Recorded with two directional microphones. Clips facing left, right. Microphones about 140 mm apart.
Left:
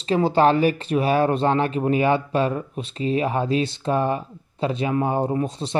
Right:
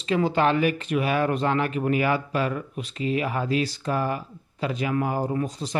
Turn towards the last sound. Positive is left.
turn(degrees=25)  # may be behind; listen again after turning